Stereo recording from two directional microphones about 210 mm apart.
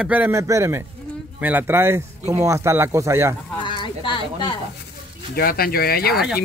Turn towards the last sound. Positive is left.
turn(degrees=45)  # may be behind; listen again after turning